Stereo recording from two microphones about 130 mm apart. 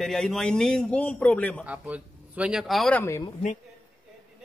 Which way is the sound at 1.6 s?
10° right (ahead or behind).